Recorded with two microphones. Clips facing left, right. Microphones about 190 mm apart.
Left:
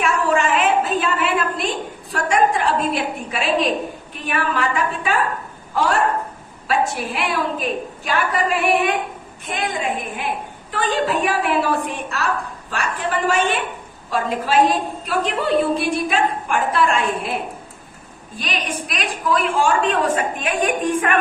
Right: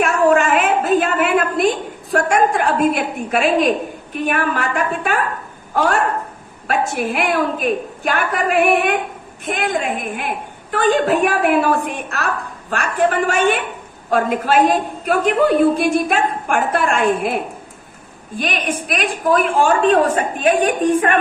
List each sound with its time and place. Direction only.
0.0 s a sound: 50° right (ahead or behind)
2.1 s a woman's voice: 50° right (ahead or behind)
18.3 s a woman's voice: 50° right (ahead or behind)